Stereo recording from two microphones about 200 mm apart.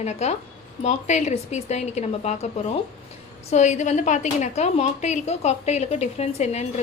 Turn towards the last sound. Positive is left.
turn(degrees=35)  # may be behind; listen again after turning